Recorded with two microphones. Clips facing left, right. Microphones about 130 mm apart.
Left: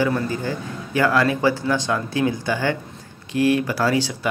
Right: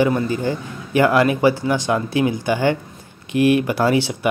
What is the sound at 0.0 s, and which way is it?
Speech, 20° right (ahead or behind).